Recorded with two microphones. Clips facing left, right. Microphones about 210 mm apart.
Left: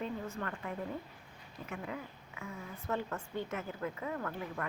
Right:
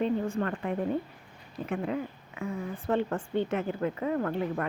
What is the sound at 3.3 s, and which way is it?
Speech, 70° right (ahead or behind).